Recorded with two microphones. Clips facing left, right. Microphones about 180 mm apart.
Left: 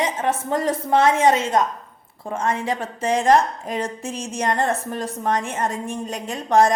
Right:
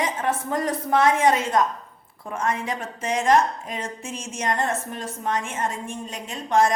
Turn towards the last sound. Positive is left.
turn(degrees=35)  # may be behind; listen again after turning